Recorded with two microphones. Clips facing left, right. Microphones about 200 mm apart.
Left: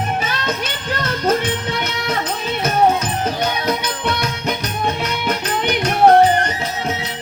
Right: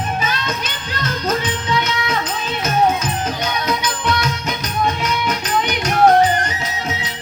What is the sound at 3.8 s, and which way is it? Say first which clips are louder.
Music: right 1 dB; 60° left (ahead or behind).